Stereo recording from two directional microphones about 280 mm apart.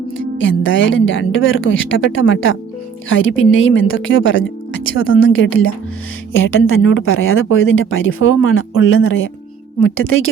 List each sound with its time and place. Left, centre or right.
0.2 s speech: left